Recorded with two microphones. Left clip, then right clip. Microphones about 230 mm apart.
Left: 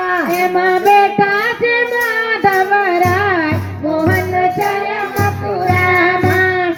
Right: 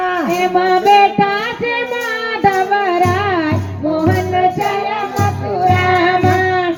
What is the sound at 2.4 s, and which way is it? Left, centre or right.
Music, right.